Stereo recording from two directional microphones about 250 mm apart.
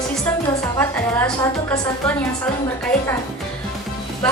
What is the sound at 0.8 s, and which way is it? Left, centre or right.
Speech, centre.